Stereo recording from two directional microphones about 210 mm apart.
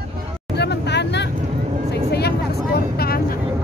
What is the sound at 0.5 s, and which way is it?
Vehicle, 55° left (ahead or behind).